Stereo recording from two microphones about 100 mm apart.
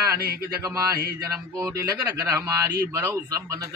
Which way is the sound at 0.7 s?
35° right (ahead or behind).